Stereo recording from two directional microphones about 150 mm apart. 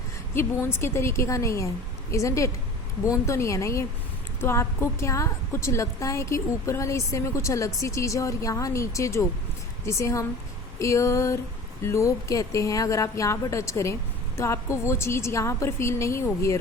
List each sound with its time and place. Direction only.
0.3 s a woman's voice: 15° left (ahead or behind)